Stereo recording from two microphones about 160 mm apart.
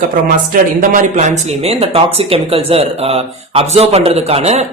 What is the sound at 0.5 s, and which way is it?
Speech, 55° right (ahead or behind).